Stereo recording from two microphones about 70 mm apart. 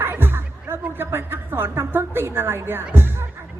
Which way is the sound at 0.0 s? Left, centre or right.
Right.